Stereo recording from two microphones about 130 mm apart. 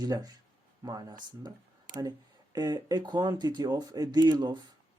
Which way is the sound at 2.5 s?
30° right (ahead or behind).